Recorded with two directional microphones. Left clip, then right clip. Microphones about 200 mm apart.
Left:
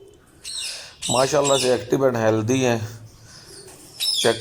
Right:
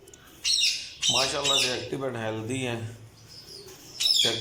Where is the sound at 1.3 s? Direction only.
15° left (ahead or behind).